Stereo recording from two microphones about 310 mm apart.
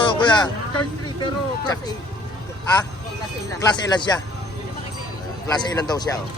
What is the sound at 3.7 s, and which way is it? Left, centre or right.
Speech, centre.